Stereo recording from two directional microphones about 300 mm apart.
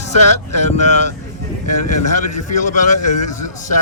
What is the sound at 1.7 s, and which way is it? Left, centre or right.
Speech, left.